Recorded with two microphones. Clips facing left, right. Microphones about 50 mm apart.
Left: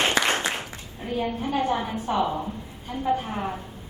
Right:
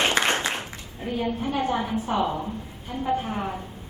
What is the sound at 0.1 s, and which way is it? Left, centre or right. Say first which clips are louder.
Applause: even; right.